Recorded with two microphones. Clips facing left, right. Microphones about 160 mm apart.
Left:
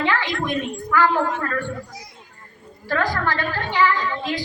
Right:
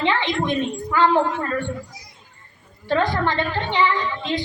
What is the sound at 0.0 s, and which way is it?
A woman's voice, 20° right (ahead or behind).